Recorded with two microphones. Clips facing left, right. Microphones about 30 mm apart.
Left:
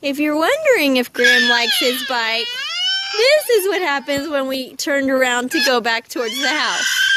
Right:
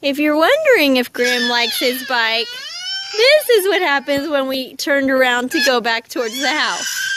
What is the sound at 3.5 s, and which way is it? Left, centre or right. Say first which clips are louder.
Speech: right 2 dB; right.